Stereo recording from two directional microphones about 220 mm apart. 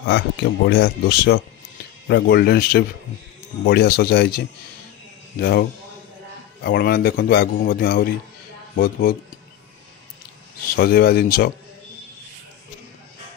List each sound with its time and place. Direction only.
0.0 s a man's voice: 50° left (ahead or behind)
5.4 s a man's voice: 45° left (ahead or behind)
10.8 s a man's voice: 45° left (ahead or behind)